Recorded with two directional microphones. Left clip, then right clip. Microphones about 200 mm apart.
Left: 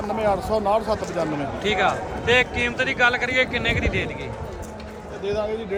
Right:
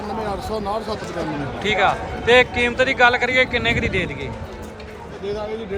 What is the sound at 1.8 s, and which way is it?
A man's voice, 15° left (ahead or behind).